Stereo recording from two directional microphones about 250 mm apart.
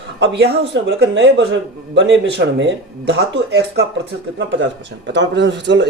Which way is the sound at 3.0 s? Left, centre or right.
Right.